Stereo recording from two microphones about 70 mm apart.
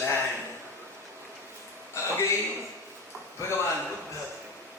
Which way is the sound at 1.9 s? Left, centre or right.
Left.